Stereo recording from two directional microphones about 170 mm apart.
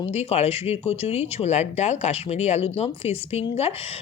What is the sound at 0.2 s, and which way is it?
Speech, 40° left (ahead or behind).